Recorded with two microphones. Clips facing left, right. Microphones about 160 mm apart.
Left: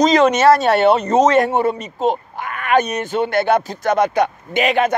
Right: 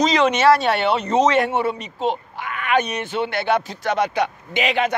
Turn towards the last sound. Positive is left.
turn(degrees=50)  # may be behind; listen again after turning